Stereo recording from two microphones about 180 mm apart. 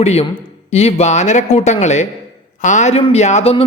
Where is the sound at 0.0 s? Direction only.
35° left (ahead or behind).